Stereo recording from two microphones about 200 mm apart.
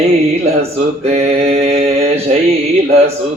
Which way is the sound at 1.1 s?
30° right (ahead or behind).